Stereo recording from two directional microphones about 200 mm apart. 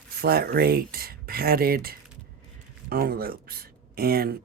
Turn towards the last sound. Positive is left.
turn(degrees=-50)  # may be behind; listen again after turning